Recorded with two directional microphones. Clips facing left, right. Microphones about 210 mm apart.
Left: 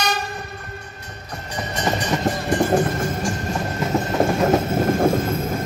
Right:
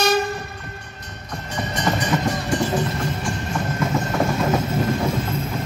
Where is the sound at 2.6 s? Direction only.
55° left (ahead or behind).